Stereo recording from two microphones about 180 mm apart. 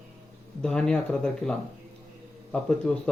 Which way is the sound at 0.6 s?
5° left (ahead or behind).